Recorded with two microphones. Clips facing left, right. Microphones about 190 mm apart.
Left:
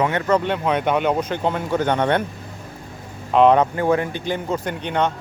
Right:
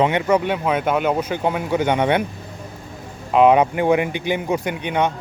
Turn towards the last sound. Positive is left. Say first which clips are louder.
# right 1 dB
turn(degrees=-10)  # may be behind; listen again after turning